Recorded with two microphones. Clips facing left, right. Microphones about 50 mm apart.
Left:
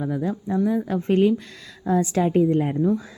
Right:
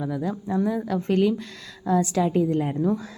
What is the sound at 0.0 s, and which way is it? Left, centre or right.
Speech, centre.